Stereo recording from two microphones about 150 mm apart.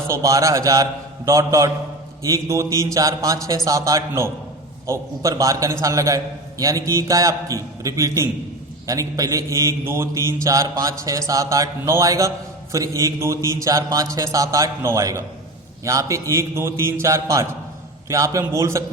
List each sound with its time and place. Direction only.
0.1 s mantra: 20° right (ahead or behind)